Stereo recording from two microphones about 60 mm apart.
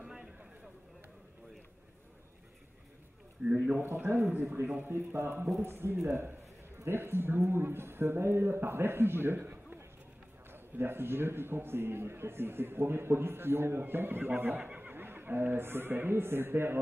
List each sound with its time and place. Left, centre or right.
0.0 s a sound: centre
3.5 s a man's voice: right
3.8 s a man's voice: right
14.6 s speech: right